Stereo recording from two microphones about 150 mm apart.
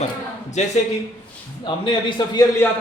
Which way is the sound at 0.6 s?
50° left (ahead or behind).